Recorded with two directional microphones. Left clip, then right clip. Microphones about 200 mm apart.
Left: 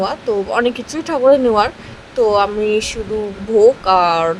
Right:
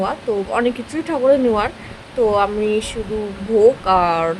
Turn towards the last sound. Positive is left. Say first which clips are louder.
# left 3 dB
turn(degrees=20)  # may be behind; listen again after turning